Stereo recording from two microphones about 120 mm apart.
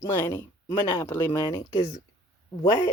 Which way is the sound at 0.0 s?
40° left (ahead or behind).